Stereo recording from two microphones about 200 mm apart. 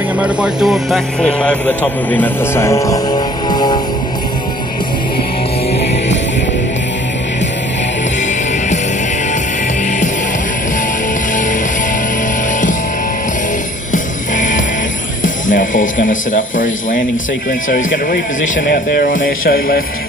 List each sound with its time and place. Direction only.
0.2 s speech: 5° right (ahead or behind); by 3.8 s 20° left (ahead or behind)
13.9 s music: 40° left (ahead or behind)
15.5 s a man's voice: 40° left (ahead or behind)